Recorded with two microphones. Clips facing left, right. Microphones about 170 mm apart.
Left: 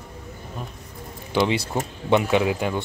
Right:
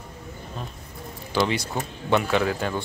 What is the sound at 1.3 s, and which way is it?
Speech, 20° left (ahead or behind).